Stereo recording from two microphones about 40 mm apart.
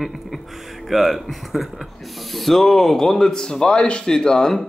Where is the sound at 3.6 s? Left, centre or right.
Left.